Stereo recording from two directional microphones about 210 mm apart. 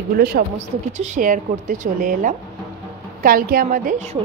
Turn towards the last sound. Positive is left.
turn(degrees=-40)  # may be behind; listen again after turning